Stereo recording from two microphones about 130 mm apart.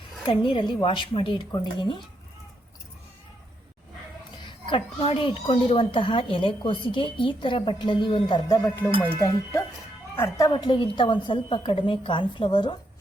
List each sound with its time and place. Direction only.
0.3 s speech: 40° left (ahead or behind)
4.7 s speech: 40° left (ahead or behind); by 10.5 s 25° left (ahead or behind)
10.5 s speech: 40° left (ahead or behind)